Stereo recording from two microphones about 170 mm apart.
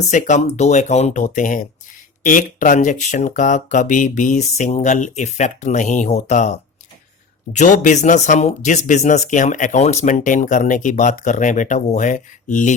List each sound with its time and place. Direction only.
0.1 s speech: 45° left (ahead or behind)